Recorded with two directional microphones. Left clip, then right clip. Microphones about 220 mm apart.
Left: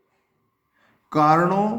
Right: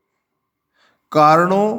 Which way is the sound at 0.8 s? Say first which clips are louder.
Right 6 dB; 45° right (ahead or behind).